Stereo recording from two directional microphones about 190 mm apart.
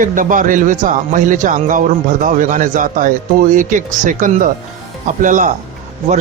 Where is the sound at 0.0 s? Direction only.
45° right (ahead or behind).